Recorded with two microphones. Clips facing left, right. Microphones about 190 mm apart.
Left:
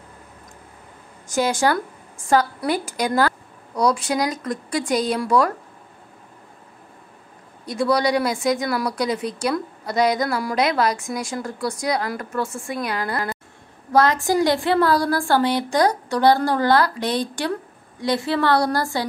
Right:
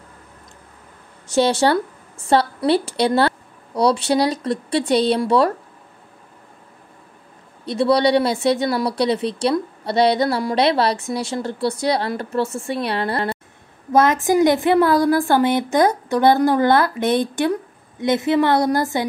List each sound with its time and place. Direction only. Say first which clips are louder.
1.3 s a woman's voice: right 4 dB; 30° right (ahead or behind)
7.6 s a woman's voice: right 4 dB; 30° right (ahead or behind)